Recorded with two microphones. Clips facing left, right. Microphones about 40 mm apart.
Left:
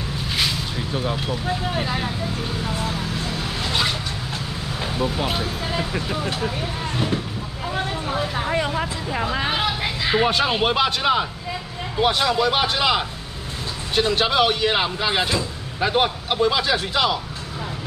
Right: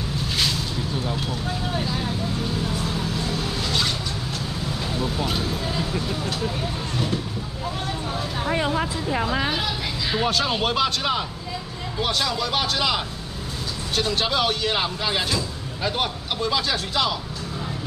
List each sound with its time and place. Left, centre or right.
0.7 s speech: left
2.9 s vehicle: centre
4.9 s speech: centre
7.7 s vehicle: left
9.4 s speech: left